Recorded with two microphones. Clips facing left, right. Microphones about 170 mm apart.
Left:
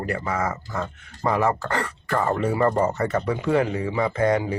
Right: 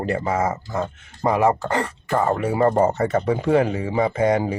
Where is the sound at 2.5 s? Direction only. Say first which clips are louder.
Right 5 dB; 25° right (ahead or behind).